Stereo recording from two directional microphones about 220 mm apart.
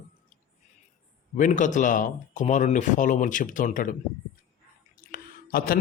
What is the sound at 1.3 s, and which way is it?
Speech, 35° left (ahead or behind).